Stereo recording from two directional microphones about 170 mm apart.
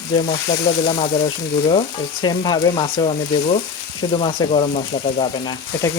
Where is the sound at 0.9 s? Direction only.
35° left (ahead or behind).